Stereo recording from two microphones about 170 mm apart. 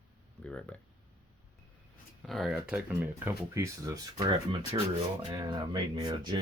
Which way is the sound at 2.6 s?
10° right (ahead or behind).